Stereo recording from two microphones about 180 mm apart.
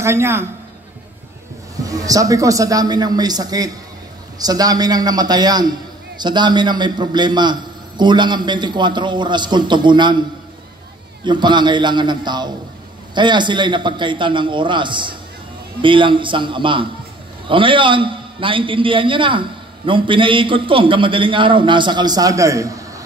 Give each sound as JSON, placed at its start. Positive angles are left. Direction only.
{"t": 0.0, "sound": "a man's voice", "side_deg": -15}
{"t": 1.9, "sound": "a man's voice", "side_deg": -20}
{"t": 11.2, "sound": "a man's voice", "side_deg": -25}